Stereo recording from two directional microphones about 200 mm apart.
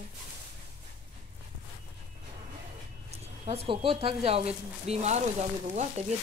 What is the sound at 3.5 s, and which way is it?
Speech, 30° right (ahead or behind).